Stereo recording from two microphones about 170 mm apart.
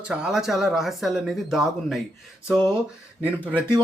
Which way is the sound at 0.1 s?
5° right (ahead or behind).